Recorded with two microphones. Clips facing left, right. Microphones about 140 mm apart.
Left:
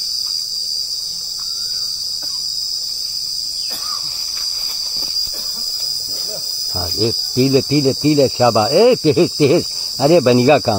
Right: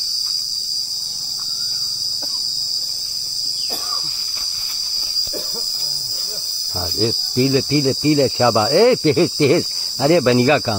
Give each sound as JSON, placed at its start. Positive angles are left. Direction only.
{"t": 7.0, "sound": "speech", "side_deg": 20}